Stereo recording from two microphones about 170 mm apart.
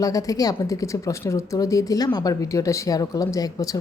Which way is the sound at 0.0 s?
20° left (ahead or behind).